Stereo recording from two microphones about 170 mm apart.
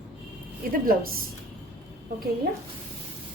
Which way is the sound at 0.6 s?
60° right (ahead or behind).